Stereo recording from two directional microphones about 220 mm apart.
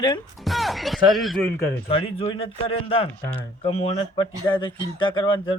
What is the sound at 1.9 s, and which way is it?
Speech, 25° left (ahead or behind).